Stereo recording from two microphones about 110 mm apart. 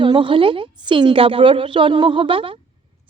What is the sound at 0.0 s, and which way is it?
Speech, 50° right (ahead or behind).